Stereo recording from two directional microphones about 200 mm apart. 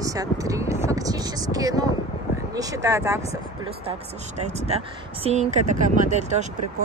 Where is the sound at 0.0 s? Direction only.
15° right (ahead or behind).